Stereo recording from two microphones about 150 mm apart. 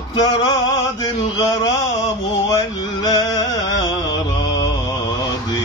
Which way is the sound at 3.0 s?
25° left (ahead or behind).